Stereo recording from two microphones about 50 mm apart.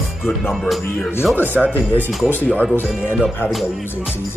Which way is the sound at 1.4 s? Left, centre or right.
Right.